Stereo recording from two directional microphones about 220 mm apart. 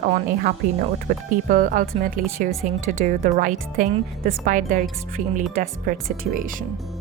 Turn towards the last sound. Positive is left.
turn(degrees=-40)  # may be behind; listen again after turning